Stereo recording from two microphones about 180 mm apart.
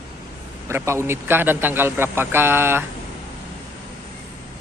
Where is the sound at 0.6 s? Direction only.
15° right (ahead or behind).